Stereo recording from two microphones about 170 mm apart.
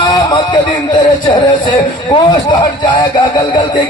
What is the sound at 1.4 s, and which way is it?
Speech, 25° left (ahead or behind).